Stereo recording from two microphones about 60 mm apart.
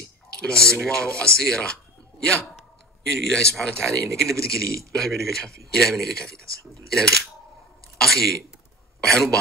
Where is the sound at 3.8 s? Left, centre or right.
Right.